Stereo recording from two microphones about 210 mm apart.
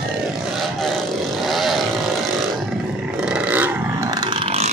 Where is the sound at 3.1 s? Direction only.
5° right (ahead or behind); by 4.7 s 25° right (ahead or behind).